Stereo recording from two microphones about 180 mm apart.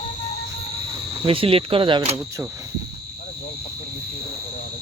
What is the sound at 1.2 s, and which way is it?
Speech, 30° right (ahead or behind).